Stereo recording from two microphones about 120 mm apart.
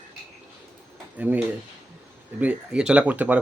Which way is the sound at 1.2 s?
15° right (ahead or behind).